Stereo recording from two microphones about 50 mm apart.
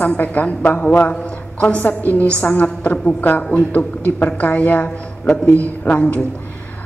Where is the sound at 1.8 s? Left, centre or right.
Left.